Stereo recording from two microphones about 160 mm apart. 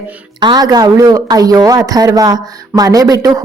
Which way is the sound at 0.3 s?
25° right (ahead or behind).